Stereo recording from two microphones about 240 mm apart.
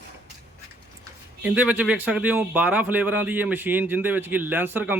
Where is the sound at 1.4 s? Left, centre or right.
Centre.